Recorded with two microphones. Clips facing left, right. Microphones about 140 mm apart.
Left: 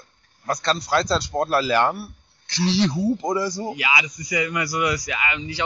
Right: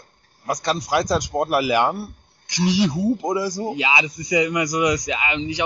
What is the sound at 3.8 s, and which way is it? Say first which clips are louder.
Speech: right 3 dB; 25° right (ahead or behind).